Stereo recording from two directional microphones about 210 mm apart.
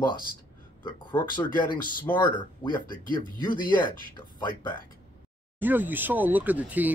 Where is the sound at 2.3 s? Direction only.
20° left (ahead or behind).